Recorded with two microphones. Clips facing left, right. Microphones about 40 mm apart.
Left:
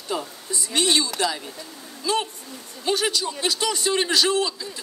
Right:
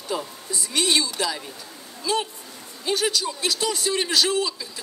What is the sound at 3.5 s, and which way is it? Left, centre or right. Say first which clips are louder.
Speech: left 3 dB; left.